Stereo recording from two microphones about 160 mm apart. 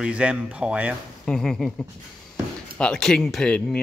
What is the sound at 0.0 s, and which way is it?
Speech, 5° right (ahead or behind).